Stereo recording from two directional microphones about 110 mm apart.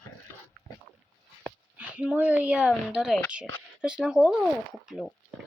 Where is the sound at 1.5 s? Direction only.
10° right (ahead or behind).